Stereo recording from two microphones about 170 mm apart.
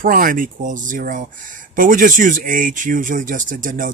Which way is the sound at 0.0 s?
55° right (ahead or behind).